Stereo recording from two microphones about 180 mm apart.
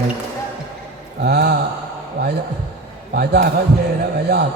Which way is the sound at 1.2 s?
65° right (ahead or behind).